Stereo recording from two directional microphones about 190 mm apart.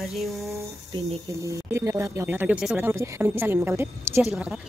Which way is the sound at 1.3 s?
15° right (ahead or behind).